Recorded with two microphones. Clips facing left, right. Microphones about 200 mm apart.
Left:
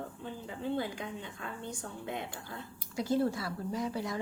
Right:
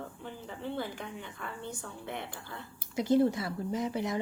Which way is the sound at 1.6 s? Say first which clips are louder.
Left 2 dB; 15° left (ahead or behind).